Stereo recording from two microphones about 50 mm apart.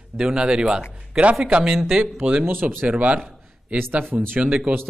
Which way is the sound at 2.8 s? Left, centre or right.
Right.